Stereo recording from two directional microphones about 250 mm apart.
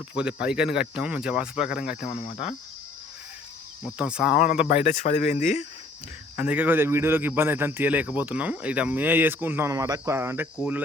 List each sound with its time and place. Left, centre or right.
0.1 s speech: centre
2.0 s speech: left
3.8 s speech: centre
4.7 s speech: left
6.3 s a man's voice: centre